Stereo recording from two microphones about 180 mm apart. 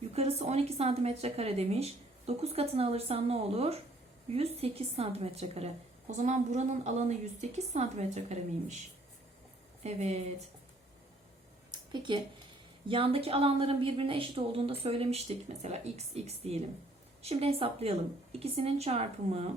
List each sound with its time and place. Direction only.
0.1 s a woman's voice: 35° right (ahead or behind)
9.8 s a woman's voice: 40° right (ahead or behind)
11.7 s a sound: 25° right (ahead or behind)
12.9 s a woman's voice: 30° right (ahead or behind)